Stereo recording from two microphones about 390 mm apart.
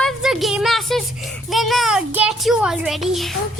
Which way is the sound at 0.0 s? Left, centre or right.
Centre.